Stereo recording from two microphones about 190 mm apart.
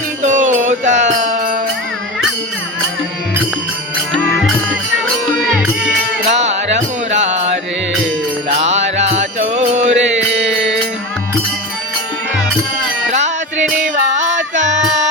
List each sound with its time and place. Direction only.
0.2 s music: 40° right (ahead or behind)
4.2 s music: 5° left (ahead or behind)
6.2 s music: 35° right (ahead or behind)
9.9 s mantra: 70° right (ahead or behind)
13.1 s music: 40° right (ahead or behind)